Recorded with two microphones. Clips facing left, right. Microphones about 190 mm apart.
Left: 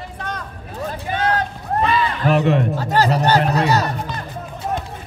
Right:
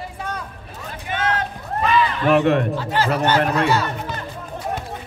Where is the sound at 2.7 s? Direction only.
40° left (ahead or behind).